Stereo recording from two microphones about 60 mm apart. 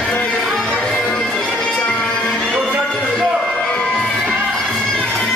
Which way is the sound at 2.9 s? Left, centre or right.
Centre.